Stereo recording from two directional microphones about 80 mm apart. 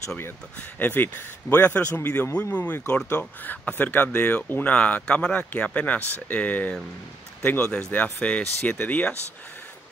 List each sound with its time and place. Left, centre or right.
0.6 s speech: left